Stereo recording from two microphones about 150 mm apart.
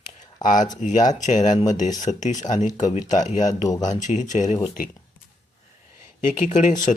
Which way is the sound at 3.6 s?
25° left (ahead or behind).